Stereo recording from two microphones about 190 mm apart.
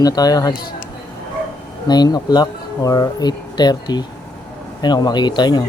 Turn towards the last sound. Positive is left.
turn(degrees=20)  # may be behind; listen again after turning